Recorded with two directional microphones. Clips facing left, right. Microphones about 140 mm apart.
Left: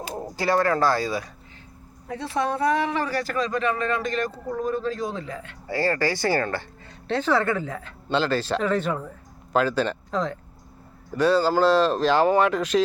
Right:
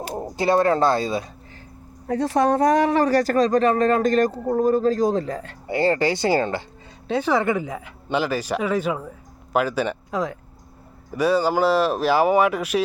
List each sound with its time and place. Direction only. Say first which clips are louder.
0.1 s speech: right 3 dB; 20° right (ahead or behind)
2.0 s speech: right 7 dB; 40° right (ahead or behind)
5.6 s speech: right 4 dB; 20° right (ahead or behind)